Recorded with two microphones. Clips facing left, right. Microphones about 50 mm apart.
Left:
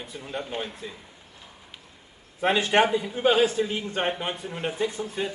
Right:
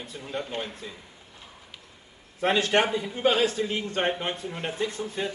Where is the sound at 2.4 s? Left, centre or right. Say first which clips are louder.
Left 2 dB; centre.